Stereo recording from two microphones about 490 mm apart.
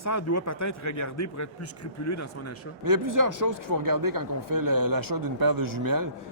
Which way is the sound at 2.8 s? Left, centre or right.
Right.